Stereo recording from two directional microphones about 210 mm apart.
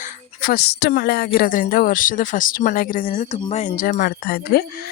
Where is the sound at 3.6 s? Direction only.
40° left (ahead or behind).